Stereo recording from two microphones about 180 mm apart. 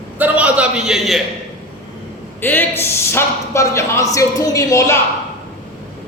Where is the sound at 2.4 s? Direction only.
10° left (ahead or behind).